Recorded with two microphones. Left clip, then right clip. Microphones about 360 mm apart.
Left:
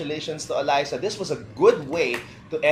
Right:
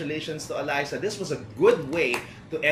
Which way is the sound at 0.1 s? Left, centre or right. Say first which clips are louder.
Left 3 dB; centre.